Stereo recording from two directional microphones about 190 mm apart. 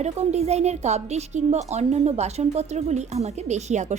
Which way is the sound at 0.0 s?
35° right (ahead or behind).